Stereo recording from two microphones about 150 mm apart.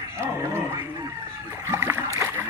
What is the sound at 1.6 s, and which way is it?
Boat, 15° right (ahead or behind).